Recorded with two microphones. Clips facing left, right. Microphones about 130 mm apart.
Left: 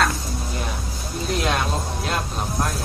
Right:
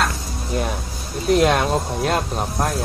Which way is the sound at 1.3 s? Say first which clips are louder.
Right 8 dB; 55° right (ahead or behind).